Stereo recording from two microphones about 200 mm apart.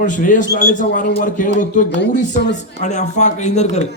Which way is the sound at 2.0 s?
60° left (ahead or behind).